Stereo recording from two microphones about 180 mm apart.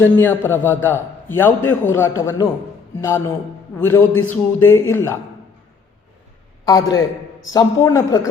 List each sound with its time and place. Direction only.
0.0 s a man's voice: 10° left (ahead or behind)
7.5 s a woman's voice: 20° left (ahead or behind)